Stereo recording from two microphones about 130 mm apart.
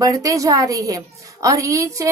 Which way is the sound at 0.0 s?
25° right (ahead or behind).